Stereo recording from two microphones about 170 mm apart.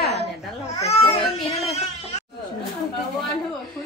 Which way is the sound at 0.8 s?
40° left (ahead or behind).